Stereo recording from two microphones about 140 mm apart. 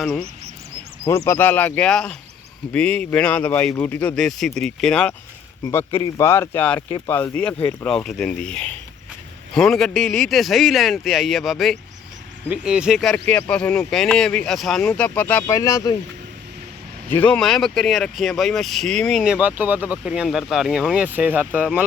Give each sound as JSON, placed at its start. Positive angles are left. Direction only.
{"t": 0.0, "sound": "speech", "side_deg": 5}
{"t": 1.0, "sound": "speech", "side_deg": 20}
{"t": 6.1, "sound": "speech", "side_deg": 20}
{"t": 15.4, "sound": "speech", "side_deg": 25}
{"t": 17.1, "sound": "speech", "side_deg": 10}
{"t": 19.2, "sound": "speech", "side_deg": -10}